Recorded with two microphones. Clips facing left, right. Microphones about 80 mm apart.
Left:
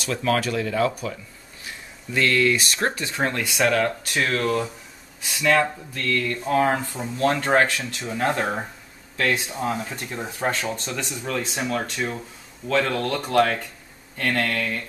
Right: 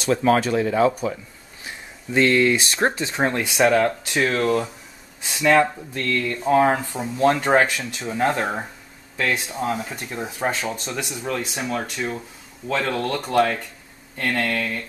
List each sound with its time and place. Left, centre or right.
0.0 s speech: right
8.3 s speech: centre
9.1 s speech: centre
9.5 s speech: centre